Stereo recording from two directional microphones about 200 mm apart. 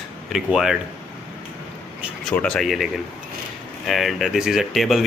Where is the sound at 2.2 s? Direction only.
5° left (ahead or behind).